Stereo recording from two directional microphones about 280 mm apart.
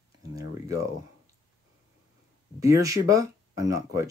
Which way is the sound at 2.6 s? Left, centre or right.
Centre.